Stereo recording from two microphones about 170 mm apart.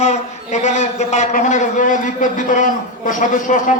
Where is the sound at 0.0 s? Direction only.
45° left (ahead or behind).